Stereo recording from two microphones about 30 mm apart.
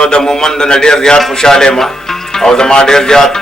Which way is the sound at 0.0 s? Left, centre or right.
Left.